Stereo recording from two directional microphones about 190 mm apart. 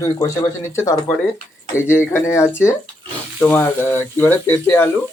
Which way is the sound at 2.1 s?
15° left (ahead or behind).